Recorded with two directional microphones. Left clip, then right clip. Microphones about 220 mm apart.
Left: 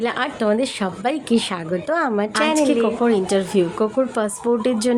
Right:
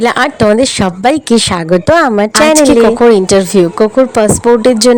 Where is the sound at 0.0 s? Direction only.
45° right (ahead or behind).